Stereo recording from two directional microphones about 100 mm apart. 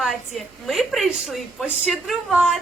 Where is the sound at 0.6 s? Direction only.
Centre (ahead or behind).